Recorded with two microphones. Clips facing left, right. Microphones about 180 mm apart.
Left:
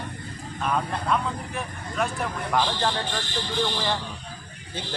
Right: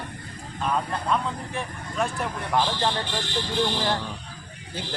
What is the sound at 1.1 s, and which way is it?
Speech, centre (ahead or behind).